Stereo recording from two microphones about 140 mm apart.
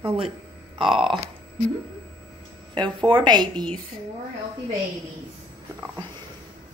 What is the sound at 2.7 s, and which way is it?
Speech, 35° right (ahead or behind).